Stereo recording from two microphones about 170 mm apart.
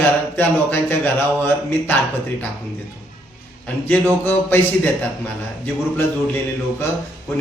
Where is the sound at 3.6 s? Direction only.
10° left (ahead or behind).